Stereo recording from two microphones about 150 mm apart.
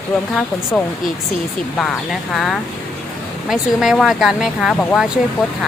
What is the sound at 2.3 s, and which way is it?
A woman's voice, centre (ahead or behind).